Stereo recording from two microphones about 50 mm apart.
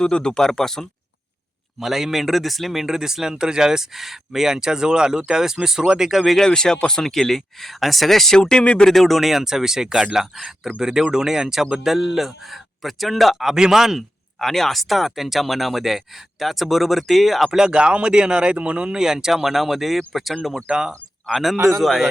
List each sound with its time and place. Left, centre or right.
0.0 s speech: centre
1.8 s speech: centre
6.3 s speech: centre
8.4 s speech: centre
8.9 s speech: centre
17.6 s speech: centre
18.9 s speech: centre
20.7 s speech: centre
21.3 s speech: centre